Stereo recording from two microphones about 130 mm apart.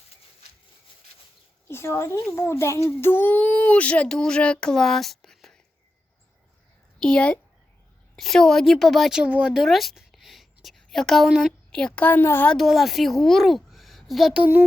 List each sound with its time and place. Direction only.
1.6 s a child's voice: 20° left (ahead or behind); by 5.5 s 5° left (ahead or behind)
7.0 s a child's voice: 5° left (ahead or behind)
12.5 s speech: centre (ahead or behind)